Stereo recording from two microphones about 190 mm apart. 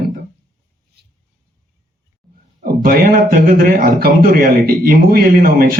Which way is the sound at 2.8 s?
45° right (ahead or behind).